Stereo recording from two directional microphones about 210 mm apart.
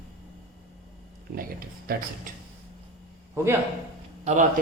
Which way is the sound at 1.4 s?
45° right (ahead or behind).